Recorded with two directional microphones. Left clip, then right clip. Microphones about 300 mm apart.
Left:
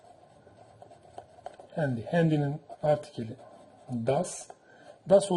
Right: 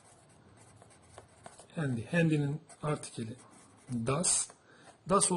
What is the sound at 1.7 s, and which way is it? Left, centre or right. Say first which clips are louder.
Speech: left 5 dB; centre.